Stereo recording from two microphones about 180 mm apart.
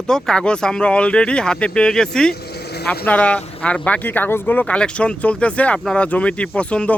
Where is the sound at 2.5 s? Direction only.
65° left (ahead or behind).